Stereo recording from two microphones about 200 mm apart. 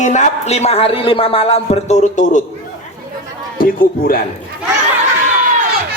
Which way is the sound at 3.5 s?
45° left (ahead or behind).